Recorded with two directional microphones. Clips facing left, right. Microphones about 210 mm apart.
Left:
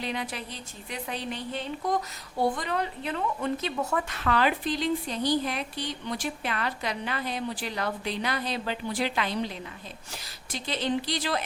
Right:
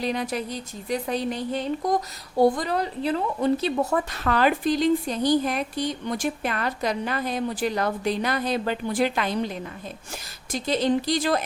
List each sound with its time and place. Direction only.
0.0 s a woman's voice: 40° right (ahead or behind)
10.5 s a woman's voice: 45° right (ahead or behind)